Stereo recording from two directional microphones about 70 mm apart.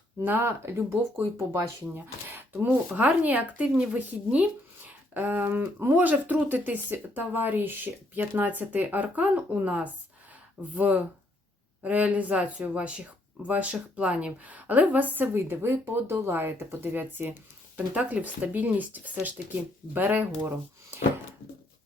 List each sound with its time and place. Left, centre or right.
0.2 s speech: right
2.3 s a sound: right
2.6 s a woman's voice: right